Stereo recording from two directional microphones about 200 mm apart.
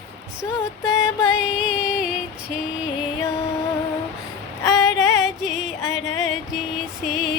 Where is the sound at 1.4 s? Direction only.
5° right (ahead or behind).